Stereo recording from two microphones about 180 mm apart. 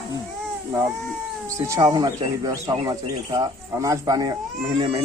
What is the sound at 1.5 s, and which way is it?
Speech, 15° right (ahead or behind).